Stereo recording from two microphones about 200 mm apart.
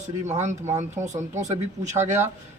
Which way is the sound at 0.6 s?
15° right (ahead or behind).